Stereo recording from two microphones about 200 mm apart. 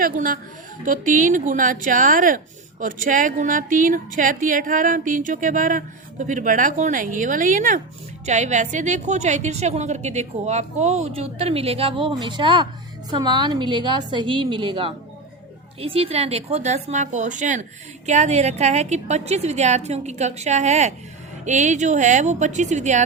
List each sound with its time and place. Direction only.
0.0 s a woman's voice: 45° right (ahead or behind)